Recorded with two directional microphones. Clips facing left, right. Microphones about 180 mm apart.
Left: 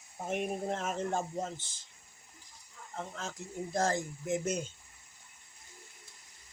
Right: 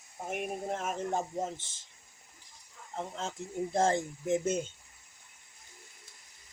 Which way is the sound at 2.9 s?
25° right (ahead or behind).